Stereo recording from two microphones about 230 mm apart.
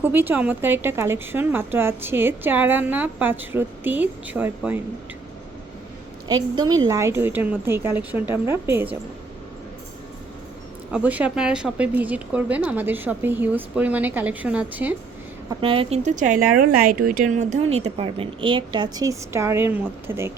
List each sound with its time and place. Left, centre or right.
0.0 s speech: centre
6.2 s speech: centre
10.9 s speech: centre
15.4 s a woman's voice: right